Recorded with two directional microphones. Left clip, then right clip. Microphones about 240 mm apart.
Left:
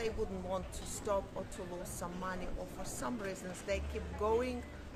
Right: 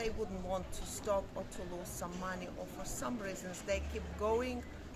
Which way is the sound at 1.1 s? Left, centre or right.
Centre.